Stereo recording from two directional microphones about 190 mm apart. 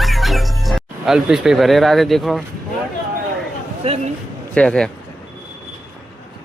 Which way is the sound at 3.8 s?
30° right (ahead or behind).